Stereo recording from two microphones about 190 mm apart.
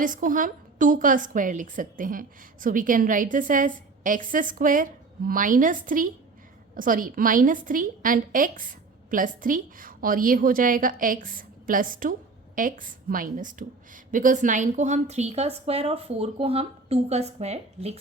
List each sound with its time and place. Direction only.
0.0 s a woman's voice: 45° right (ahead or behind)